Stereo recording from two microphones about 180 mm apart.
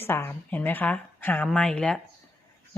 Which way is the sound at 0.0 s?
10° left (ahead or behind).